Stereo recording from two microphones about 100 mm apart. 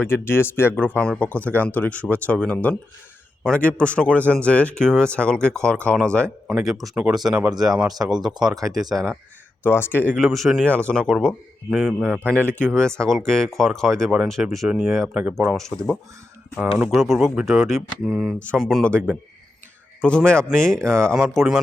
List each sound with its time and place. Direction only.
0.0 s speech: 25° left (ahead or behind); by 9.0 s centre (ahead or behind)
9.6 s speech: 25° left (ahead or behind)
10.2 s speech: centre (ahead or behind)
10.7 s speech: 10° left (ahead or behind); by 12.2 s 5° right (ahead or behind)
12.5 s speech: 5° left (ahead or behind)
15.1 s speech: 10° right (ahead or behind)
15.4 s speech: 5° left (ahead or behind)
16.8 s speech: 5° right (ahead or behind)
20.0 s speech: 10° left (ahead or behind)